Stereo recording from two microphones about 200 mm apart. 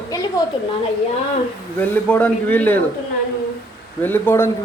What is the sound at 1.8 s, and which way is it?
Speech, 5° left (ahead or behind).